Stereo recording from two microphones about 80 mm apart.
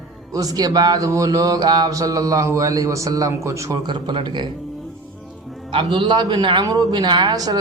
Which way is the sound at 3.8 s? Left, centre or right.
Right.